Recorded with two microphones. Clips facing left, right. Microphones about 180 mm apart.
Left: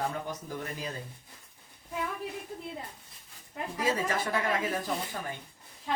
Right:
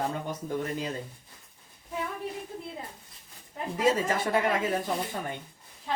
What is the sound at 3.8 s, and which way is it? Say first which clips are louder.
Speech: right 4 dB; 25° right (ahead or behind).